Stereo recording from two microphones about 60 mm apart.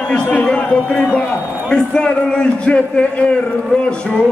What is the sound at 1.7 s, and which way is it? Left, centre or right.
Speech, centre.